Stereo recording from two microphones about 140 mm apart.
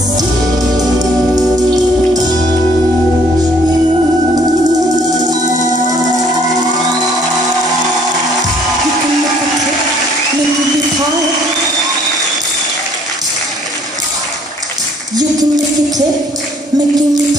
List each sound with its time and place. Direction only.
0.7 s music: 25° right (ahead or behind)
5.4 s music: 60° right (ahead or behind)
15.1 s a sound: 30° right (ahead or behind)